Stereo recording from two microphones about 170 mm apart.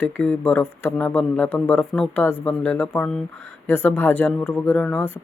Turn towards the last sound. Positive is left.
turn(degrees=10)  # may be behind; listen again after turning